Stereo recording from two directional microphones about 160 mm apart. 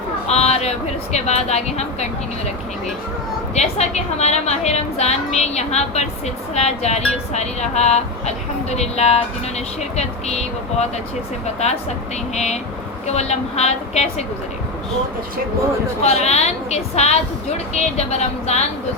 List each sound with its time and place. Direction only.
0.3 s a sound: 40° left (ahead or behind)
1.1 s a woman's voice: 45° left (ahead or behind)
3.5 s a woman's voice: 45° left (ahead or behind)
12.3 s a woman's voice: 45° left (ahead or behind)
16.0 s a woman's voice: 45° left (ahead or behind)